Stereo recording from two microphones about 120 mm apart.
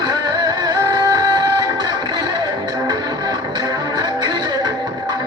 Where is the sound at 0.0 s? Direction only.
30° right (ahead or behind).